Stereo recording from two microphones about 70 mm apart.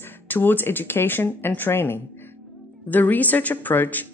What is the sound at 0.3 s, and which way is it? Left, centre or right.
Speech, left.